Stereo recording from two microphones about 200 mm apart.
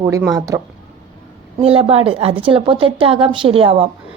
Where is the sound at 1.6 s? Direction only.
30° right (ahead or behind).